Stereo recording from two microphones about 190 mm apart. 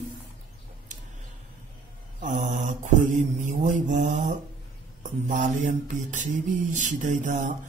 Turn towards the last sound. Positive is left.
turn(degrees=-40)  # may be behind; listen again after turning